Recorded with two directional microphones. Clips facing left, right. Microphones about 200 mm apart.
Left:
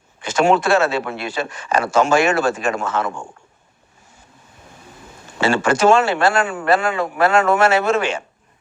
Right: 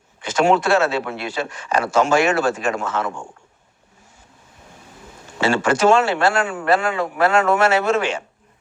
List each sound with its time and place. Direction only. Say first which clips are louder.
0.2 s speech: left 1 dB; 50° left (ahead or behind)
5.4 s speech: left 1 dB; 50° left (ahead or behind)